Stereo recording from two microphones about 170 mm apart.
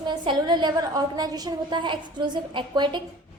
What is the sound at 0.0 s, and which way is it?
A woman's voice, 25° right (ahead or behind).